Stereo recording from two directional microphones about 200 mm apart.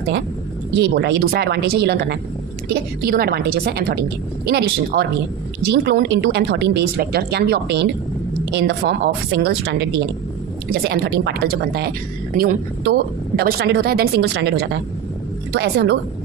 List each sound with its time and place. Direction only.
0.7 s a woman's voice: 55° right (ahead or behind)
13.4 s a woman's voice: 55° right (ahead or behind)